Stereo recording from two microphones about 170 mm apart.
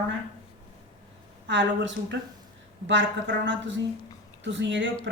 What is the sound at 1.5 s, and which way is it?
Speech, 90° right.